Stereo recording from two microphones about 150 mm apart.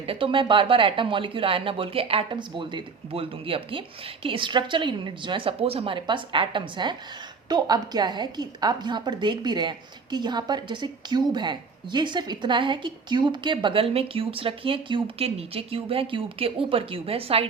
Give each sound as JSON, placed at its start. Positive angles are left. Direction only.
{"t": 0.0, "sound": "a woman's voice", "side_deg": -35}